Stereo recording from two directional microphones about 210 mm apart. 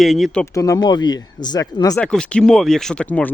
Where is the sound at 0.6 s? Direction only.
15° left (ahead or behind).